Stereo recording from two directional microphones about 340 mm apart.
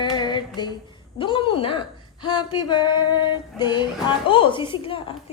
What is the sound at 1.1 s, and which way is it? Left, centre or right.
A woman's voice, centre.